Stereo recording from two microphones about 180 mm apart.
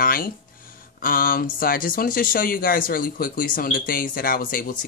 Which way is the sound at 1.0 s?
55° left (ahead or behind).